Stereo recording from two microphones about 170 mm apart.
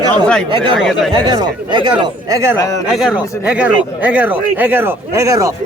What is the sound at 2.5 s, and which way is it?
Speech, 20° left (ahead or behind).